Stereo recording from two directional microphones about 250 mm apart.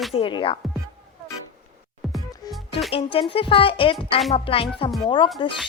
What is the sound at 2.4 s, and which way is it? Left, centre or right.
Music, centre.